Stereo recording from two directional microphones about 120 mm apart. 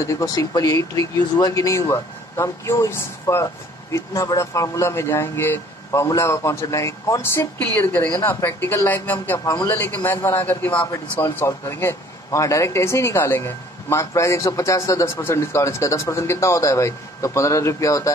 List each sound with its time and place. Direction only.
0.0 s a man's voice: 30° left (ahead or behind)